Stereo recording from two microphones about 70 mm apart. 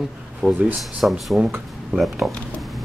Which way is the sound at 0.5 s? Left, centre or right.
Right.